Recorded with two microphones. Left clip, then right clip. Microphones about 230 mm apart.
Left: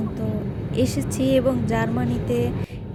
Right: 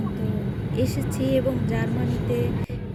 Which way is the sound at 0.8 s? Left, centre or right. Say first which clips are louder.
Left 4 dB; centre.